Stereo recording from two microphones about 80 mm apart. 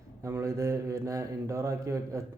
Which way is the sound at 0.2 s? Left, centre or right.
Right.